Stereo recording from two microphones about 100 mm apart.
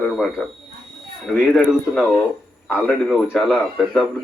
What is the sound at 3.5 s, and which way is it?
Speech, 5° left (ahead or behind).